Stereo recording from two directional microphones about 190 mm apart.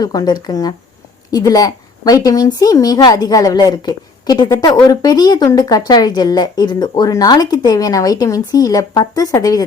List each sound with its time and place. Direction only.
0.0 s a woman's voice: 20° left (ahead or behind)